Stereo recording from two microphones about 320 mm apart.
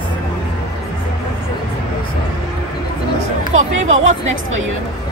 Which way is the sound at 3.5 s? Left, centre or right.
Right.